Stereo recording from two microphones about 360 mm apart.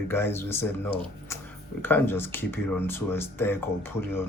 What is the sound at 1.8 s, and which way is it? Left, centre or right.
Speech, centre.